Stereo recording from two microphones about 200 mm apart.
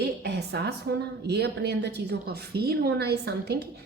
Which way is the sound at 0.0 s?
55° right (ahead or behind).